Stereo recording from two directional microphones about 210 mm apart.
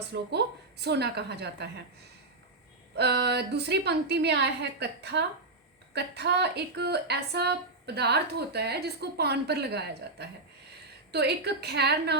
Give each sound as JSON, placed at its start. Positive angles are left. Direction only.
{"t": 0.1, "sound": "a woman's voice", "side_deg": -55}
{"t": 2.9, "sound": "a woman's voice", "side_deg": -50}